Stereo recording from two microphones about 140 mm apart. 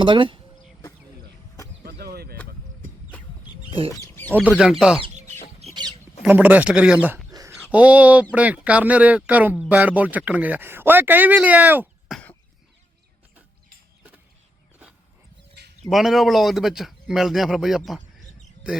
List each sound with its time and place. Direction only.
0.0 s speech: 35° right (ahead or behind)
1.8 s a sound: 90° right
3.8 s duck: 15° left (ahead or behind)
4.4 s a man's voice: 10° right (ahead or behind)
5.6 s rodents: 50° right (ahead or behind)
6.2 s speech: 10° right (ahead or behind)
7.3 s a sound: 25° right (ahead or behind)
7.6 s speech: 10° right (ahead or behind)
12.1 s cough: 10° left (ahead or behind)
15.9 s a man's voice: centre (ahead or behind)